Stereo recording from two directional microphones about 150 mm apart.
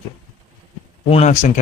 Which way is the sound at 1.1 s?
50° left (ahead or behind).